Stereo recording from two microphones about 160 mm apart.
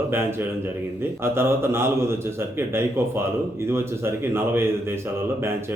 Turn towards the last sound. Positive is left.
turn(degrees=-15)  # may be behind; listen again after turning